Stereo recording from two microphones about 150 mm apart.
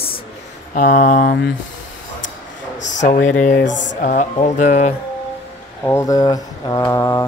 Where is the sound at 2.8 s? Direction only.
55° left (ahead or behind).